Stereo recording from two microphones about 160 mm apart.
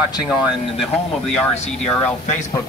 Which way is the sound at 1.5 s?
45° left (ahead or behind).